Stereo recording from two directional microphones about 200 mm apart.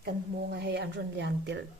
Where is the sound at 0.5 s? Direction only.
55° right (ahead or behind).